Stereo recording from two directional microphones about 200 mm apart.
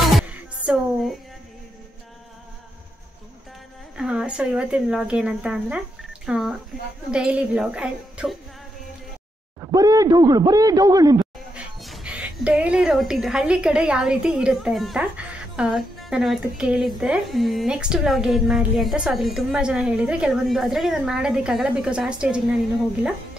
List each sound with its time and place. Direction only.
0.0 s music: centre (ahead or behind)
3.9 s a woman's voice: 5° right (ahead or behind)
9.6 s speech: 20° right (ahead or behind)
11.5 s a woman's voice: 5° right (ahead or behind)